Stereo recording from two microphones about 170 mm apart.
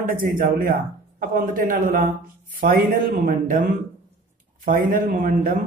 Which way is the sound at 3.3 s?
50° right (ahead or behind).